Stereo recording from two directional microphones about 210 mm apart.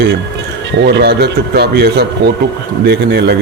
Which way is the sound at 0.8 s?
55° right (ahead or behind).